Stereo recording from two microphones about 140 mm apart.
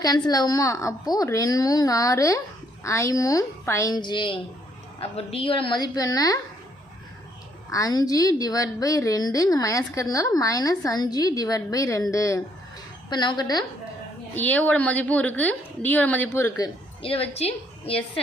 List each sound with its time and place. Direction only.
0.0 s a woman's voice: 25° left (ahead or behind)
7.7 s a woman's voice: 25° left (ahead or behind)
14.3 s a woman's voice: 10° left (ahead or behind)
17.0 s a woman's voice: 45° left (ahead or behind)